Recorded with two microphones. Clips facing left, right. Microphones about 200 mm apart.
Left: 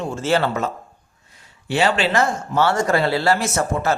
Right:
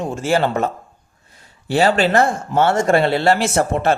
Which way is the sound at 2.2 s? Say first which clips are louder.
Right 3 dB; 25° right (ahead or behind).